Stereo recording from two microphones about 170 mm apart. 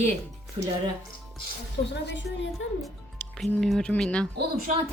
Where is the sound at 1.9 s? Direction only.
90° left.